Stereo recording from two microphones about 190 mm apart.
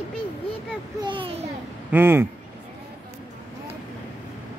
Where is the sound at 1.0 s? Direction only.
25° right (ahead or behind).